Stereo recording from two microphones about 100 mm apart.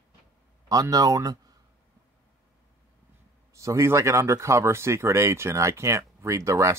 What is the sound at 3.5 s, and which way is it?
Speech, 30° right (ahead or behind).